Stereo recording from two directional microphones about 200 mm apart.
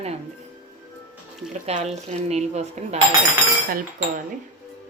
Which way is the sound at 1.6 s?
35° right (ahead or behind).